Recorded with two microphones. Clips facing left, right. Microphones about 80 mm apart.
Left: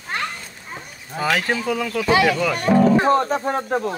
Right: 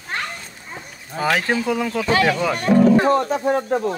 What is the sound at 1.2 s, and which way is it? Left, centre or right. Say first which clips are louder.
Speech: right 1 dB; right.